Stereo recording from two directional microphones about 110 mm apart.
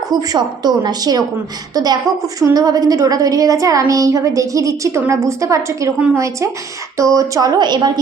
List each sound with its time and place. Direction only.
0.1 s a woman's voice: 35° right (ahead or behind)